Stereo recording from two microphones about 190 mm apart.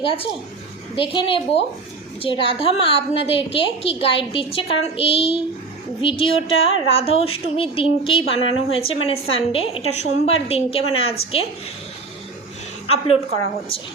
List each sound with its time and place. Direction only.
0.0 s a woman's voice: 30° left (ahead or behind)